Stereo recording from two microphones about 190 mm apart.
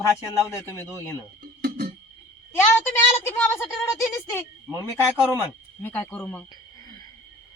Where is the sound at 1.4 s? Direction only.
50° right (ahead or behind).